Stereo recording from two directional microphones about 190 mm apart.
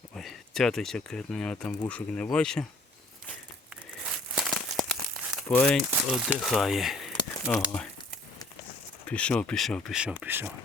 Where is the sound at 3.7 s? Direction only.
5° right (ahead or behind).